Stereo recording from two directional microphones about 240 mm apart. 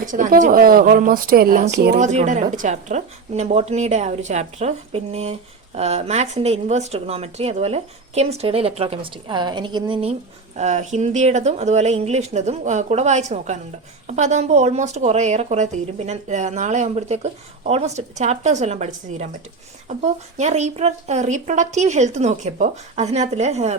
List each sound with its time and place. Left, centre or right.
0.0 s speech: right
2.1 s speech: right